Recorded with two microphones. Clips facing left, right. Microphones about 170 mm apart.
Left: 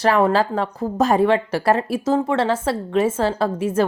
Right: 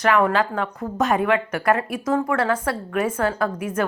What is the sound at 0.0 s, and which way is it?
Speech, 30° left (ahead or behind).